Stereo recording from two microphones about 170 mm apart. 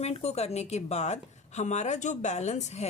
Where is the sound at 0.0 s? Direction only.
40° left (ahead or behind).